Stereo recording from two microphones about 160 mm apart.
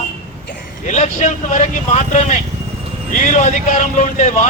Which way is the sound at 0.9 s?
45° left (ahead or behind).